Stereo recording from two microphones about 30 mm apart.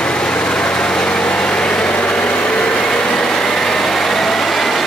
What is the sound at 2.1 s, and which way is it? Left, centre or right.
Vehicle, left.